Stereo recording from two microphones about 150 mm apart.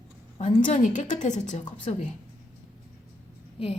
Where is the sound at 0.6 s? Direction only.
55° left (ahead or behind).